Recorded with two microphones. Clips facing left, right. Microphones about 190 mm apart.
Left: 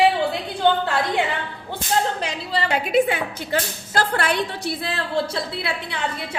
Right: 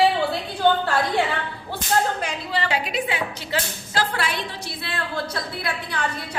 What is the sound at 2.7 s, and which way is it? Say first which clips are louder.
A woman's voice: left 6 dB; 55° left (ahead or behind).